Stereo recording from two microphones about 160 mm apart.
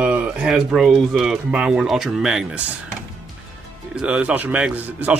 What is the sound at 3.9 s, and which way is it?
A man's voice, 5° right (ahead or behind).